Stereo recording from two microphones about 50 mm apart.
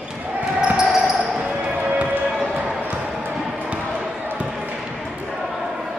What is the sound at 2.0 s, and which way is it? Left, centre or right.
Basketball bounce, centre.